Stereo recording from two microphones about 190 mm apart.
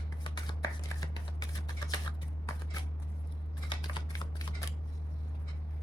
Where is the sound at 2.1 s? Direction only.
25° left (ahead or behind).